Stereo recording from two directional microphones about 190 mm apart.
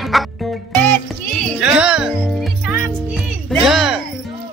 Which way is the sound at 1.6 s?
5° right (ahead or behind).